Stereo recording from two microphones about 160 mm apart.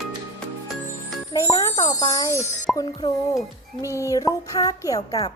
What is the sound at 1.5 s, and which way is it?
A woman's voice, 25° left (ahead or behind).